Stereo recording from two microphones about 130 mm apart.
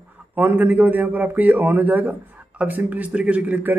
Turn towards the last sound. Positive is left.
turn(degrees=-10)  # may be behind; listen again after turning